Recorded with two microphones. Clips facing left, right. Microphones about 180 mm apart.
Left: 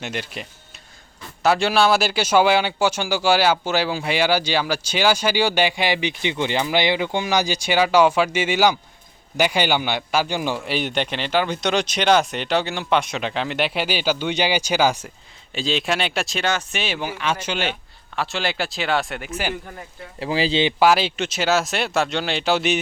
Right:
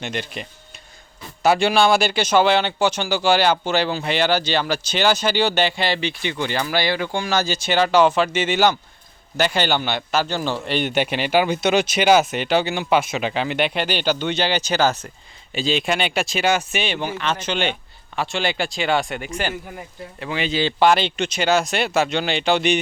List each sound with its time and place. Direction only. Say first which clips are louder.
0.0 s a man's voice: right 1 dB; 5° left (ahead or behind)
15.5 s a man's voice: right 1 dB; centre (ahead or behind)
16.8 s a man's voice: right 1 dB; 5° left (ahead or behind)
20.1 s speech: left 3 dB; 30° left (ahead or behind)
20.7 s a man's voice: right 3 dB; 5° left (ahead or behind)